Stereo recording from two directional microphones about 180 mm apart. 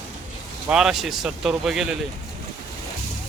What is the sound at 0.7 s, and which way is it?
Speech, 5° right (ahead or behind).